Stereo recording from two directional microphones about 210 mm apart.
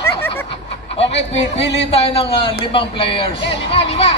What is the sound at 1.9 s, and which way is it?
Speech, 25° left (ahead or behind).